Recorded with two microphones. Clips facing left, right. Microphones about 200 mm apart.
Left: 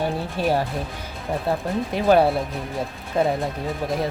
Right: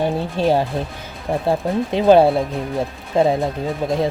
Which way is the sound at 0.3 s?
25° right (ahead or behind).